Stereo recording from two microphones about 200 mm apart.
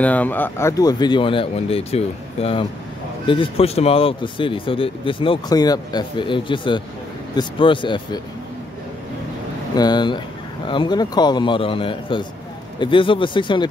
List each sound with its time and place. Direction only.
0.0 s speech: 5° left (ahead or behind); by 8.2 s 25° left (ahead or behind)
9.8 s speech: 20° left (ahead or behind)